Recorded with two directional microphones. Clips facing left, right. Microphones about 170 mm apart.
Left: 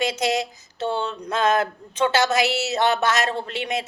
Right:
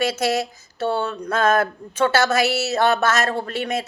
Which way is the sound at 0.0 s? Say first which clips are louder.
Right 2 dB; 20° left (ahead or behind).